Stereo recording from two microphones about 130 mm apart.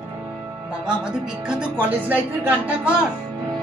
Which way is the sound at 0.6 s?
5° right (ahead or behind).